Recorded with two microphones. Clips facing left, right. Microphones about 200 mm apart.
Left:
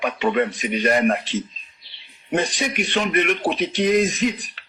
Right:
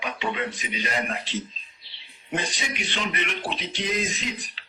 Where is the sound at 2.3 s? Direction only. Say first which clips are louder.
Left 8 dB; 50° left (ahead or behind).